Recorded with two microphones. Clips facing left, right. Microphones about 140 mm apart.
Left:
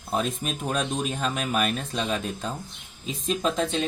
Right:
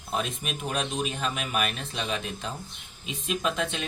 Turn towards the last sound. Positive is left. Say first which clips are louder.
# left 4 dB
turn(degrees=35)  # may be behind; listen again after turning